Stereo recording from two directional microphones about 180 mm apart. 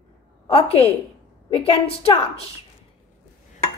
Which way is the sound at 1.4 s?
35° left (ahead or behind).